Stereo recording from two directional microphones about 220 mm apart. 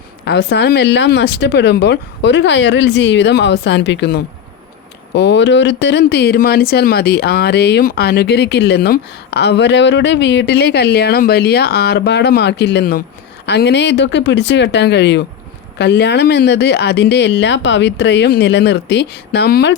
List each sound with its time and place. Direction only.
0.3 s speech: 50° left (ahead or behind)